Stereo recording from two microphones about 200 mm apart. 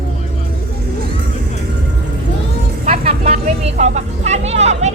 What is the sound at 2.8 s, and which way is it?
Speech, 30° right (ahead or behind).